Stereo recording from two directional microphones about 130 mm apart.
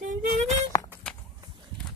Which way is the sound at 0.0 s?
80° right.